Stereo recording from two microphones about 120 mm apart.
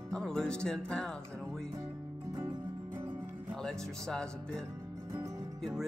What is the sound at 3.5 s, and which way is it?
Speech, 5° left (ahead or behind).